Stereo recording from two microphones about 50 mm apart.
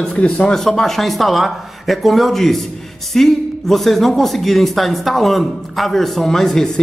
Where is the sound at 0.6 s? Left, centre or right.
Centre.